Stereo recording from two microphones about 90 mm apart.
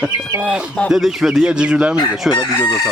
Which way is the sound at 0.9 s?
5° right (ahead or behind).